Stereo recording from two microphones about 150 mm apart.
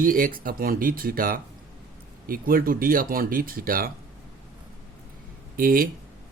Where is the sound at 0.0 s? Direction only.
70° right (ahead or behind).